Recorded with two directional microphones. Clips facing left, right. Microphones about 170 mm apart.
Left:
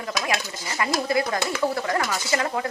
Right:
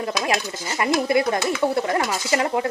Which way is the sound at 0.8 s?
25° right (ahead or behind).